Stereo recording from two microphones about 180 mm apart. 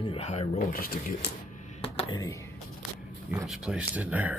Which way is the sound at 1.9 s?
25° left (ahead or behind).